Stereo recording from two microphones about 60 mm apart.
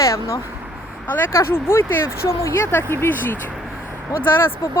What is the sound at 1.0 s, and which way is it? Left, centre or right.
Speech, left.